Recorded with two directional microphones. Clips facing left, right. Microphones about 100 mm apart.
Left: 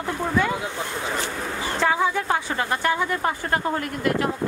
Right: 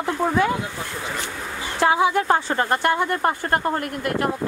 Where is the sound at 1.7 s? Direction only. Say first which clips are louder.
Right 4 dB; 15° right (ahead or behind).